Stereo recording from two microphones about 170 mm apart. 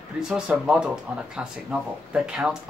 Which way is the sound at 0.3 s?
5° right (ahead or behind).